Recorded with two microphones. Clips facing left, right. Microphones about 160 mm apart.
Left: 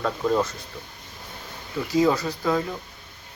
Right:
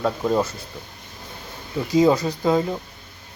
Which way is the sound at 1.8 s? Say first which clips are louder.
Right 4 dB; 20° right (ahead or behind).